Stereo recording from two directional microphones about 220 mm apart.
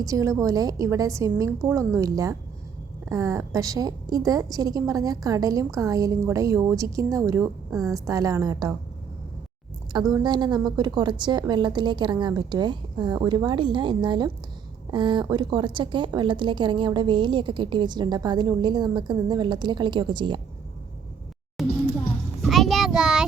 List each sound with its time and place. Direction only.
0.0 s a woman's voice: 15° right (ahead or behind)
10.1 s a woman's voice: 20° right (ahead or behind)
21.6 s music: centre (ahead or behind)
22.4 s child singing: centre (ahead or behind)